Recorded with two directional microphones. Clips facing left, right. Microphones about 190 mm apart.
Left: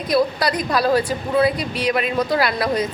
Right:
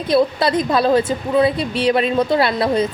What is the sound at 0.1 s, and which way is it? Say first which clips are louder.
A woman's voice: right 3 dB; 25° right (ahead or behind).